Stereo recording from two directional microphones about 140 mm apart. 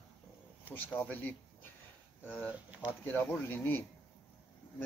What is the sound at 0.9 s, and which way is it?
Speech, 10° left (ahead or behind).